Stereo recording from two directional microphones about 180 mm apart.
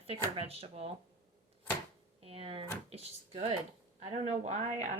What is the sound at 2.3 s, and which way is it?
Speech, 30° right (ahead or behind).